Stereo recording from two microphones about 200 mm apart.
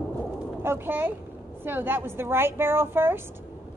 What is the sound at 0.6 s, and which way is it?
A woman's voice, 10° right (ahead or behind).